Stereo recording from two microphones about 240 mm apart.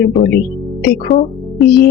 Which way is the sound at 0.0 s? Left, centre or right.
Left.